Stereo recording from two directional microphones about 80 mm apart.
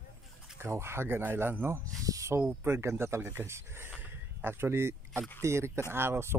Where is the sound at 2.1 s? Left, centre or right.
Right.